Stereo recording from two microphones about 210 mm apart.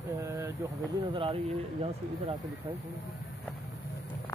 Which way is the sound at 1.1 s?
25° right (ahead or behind).